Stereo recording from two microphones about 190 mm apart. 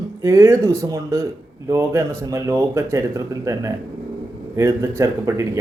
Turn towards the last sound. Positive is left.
turn(degrees=-15)  # may be behind; listen again after turning